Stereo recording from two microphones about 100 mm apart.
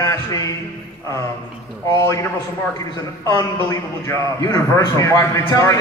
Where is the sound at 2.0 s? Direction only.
30° left (ahead or behind).